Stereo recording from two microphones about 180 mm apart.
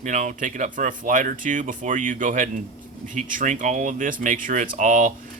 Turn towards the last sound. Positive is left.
turn(degrees=-45)  # may be behind; listen again after turning